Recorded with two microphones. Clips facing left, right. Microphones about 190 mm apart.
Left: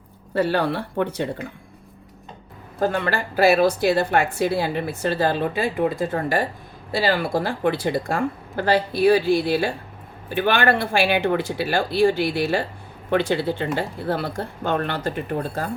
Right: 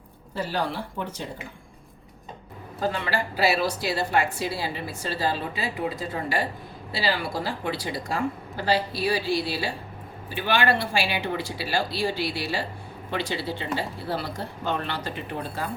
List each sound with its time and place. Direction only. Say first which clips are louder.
0.3 s speech: left 7 dB; 65° left (ahead or behind)
2.8 s a woman's voice: left 5 dB; 50° left (ahead or behind)